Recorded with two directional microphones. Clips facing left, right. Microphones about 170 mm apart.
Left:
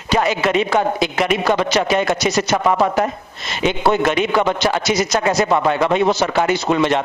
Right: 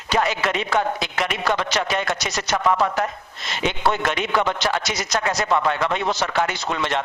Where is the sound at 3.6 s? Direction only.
10° left (ahead or behind).